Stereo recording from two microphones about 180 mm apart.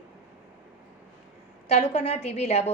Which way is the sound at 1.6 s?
35° left (ahead or behind).